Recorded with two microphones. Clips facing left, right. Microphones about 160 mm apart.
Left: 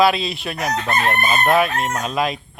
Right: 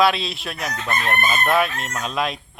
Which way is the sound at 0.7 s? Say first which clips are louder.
Left 3 dB; 55° left (ahead or behind).